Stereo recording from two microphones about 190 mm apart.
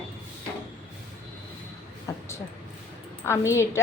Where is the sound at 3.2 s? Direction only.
15° left (ahead or behind).